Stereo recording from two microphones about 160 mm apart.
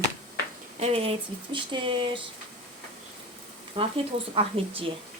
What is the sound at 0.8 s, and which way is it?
Speech, 40° right (ahead or behind).